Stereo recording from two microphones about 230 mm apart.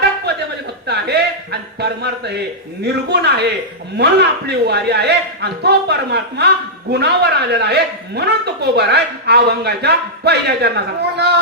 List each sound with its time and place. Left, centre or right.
0.3 s chuckle: right
0.9 s a sound: right
2.8 s a woman's voice: right